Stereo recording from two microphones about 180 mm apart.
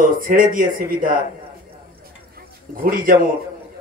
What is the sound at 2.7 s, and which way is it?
Speech, 55° right (ahead or behind).